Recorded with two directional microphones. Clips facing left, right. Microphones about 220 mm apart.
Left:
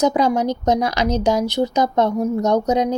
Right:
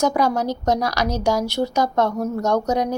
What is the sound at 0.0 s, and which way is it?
Speech, 20° left (ahead or behind).